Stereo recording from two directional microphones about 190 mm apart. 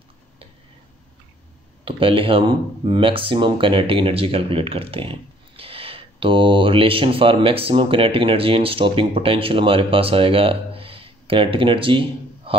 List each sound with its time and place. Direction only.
1.9 s speech: 30° right (ahead or behind)